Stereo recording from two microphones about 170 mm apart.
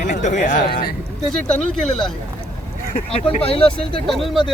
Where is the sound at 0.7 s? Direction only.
60° left (ahead or behind).